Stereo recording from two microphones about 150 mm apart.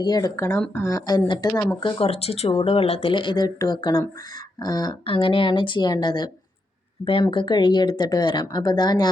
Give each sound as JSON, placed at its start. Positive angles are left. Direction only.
{"t": 0.0, "sound": "speech", "side_deg": 25}
{"t": 1.7, "sound": "speech", "side_deg": 35}